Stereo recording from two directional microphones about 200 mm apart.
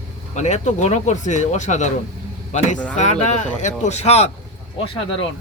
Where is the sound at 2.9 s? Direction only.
35° left (ahead or behind).